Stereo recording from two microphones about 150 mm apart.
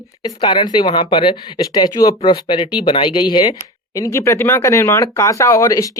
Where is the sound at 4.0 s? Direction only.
20° left (ahead or behind).